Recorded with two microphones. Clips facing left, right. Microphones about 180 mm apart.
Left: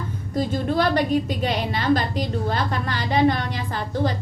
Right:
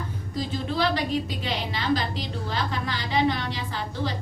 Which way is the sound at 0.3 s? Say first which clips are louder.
Left 6 dB; 50° left (ahead or behind).